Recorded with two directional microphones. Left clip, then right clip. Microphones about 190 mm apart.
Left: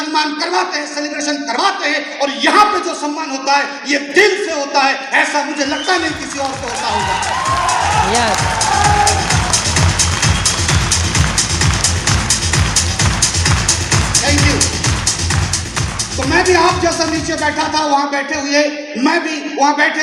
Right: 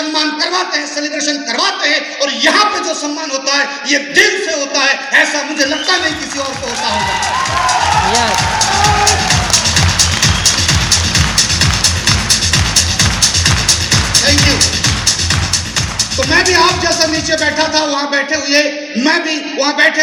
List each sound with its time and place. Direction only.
1.5 s a man's voice: 25° right (ahead or behind)
9.0 s music: 30° right (ahead or behind)
16.3 s a man's voice: 25° right (ahead or behind)